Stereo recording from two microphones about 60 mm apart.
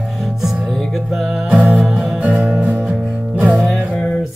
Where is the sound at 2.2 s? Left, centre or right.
Right.